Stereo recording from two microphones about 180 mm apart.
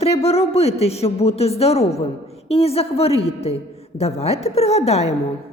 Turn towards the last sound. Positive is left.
turn(degrees=35)  # may be behind; listen again after turning